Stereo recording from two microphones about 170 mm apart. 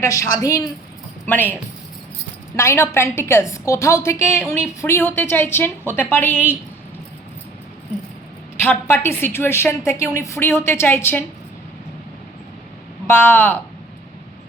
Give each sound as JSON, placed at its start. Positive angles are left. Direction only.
{"t": 0.0, "sound": "a woman's voice", "side_deg": 20}
{"t": 2.6, "sound": "a woman's voice", "side_deg": 15}
{"t": 8.6, "sound": "a woman's voice", "side_deg": 15}
{"t": 13.1, "sound": "a woman's voice", "side_deg": 15}